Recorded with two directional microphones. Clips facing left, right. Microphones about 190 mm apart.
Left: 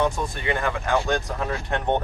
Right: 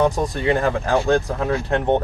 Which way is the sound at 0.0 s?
35° right (ahead or behind).